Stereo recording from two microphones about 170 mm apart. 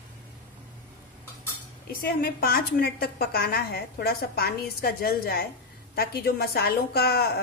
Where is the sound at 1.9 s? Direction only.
60° left (ahead or behind).